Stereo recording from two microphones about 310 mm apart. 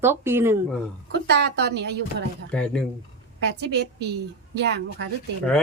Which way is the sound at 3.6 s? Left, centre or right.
Right.